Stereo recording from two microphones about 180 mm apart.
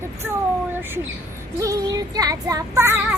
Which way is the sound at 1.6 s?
20° right (ahead or behind).